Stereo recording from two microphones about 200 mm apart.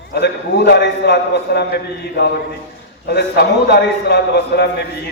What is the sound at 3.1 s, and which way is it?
A man's voice, 55° left (ahead or behind).